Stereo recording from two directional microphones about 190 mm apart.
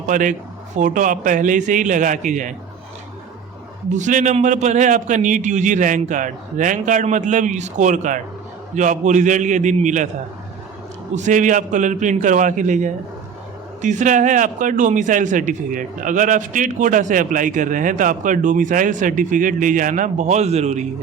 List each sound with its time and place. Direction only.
0.1 s a man's voice: 40° right (ahead or behind)
3.8 s a man's voice: 40° right (ahead or behind)
11.1 s a man's voice: 40° right (ahead or behind)